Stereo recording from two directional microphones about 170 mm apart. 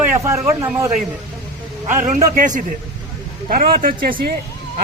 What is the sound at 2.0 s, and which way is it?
Speech, 50° right (ahead or behind).